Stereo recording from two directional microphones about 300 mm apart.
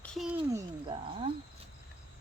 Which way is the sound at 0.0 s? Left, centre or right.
Centre.